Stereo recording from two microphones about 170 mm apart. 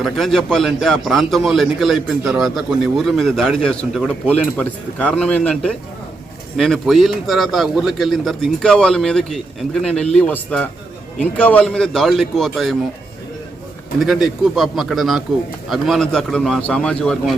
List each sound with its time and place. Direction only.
0.0 s a man's voice: centre (ahead or behind)
14.0 s a man's voice: centre (ahead or behind)